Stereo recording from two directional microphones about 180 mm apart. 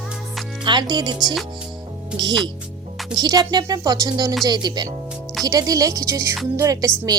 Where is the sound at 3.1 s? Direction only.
20° right (ahead or behind).